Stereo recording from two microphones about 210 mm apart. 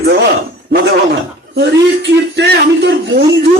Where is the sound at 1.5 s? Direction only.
55° right (ahead or behind).